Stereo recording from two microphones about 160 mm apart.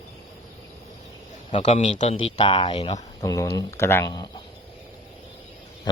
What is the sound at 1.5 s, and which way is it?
Speech, 45° left (ahead or behind).